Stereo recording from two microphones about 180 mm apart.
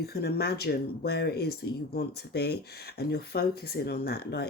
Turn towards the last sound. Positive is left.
turn(degrees=60)  # may be behind; listen again after turning